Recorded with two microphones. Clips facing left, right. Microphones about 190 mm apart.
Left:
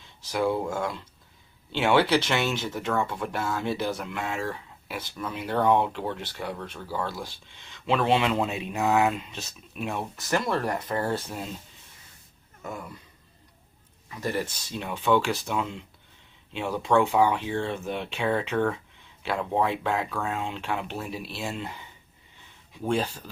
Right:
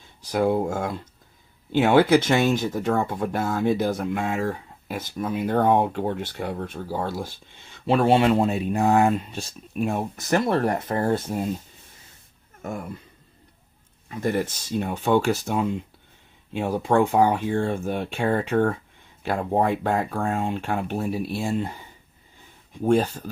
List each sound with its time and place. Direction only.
0.3 s speech: 45° right (ahead or behind)
12.6 s speech: 50° right (ahead or behind)
14.2 s speech: 50° right (ahead or behind)
22.9 s speech: 50° right (ahead or behind)